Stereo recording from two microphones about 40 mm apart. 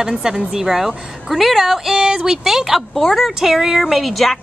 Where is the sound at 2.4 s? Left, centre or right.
Centre.